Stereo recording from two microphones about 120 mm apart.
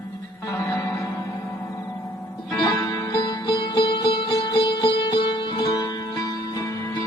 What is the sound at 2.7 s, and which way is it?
Music, 30° left (ahead or behind).